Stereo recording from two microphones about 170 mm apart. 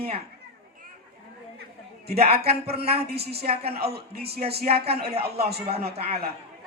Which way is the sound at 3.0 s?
70° right (ahead or behind).